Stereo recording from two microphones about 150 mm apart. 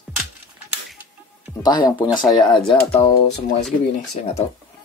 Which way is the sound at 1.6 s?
25° left (ahead or behind).